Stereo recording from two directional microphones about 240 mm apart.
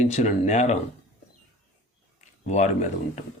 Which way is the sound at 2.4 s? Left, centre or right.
Left.